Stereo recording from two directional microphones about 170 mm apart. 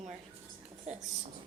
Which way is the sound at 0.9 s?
40° right (ahead or behind).